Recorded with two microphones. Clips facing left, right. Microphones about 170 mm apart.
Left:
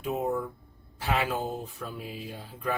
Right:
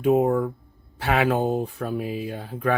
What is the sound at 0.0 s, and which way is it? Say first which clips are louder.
Speech: right 10 dB; 65° right (ahead or behind).